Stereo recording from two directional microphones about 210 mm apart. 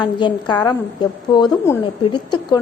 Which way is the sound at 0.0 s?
20° left (ahead or behind).